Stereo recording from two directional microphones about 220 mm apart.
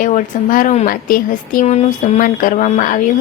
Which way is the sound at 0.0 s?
40° left (ahead or behind).